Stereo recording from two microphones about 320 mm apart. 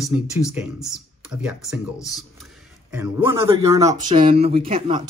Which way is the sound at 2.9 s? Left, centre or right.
Centre.